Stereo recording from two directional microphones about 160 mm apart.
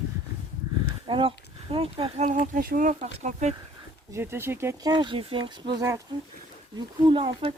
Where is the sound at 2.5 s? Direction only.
60° right (ahead or behind); by 3.5 s 45° right (ahead or behind).